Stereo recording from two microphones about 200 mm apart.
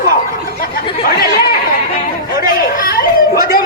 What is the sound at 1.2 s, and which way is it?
A man's voice, 50° left (ahead or behind).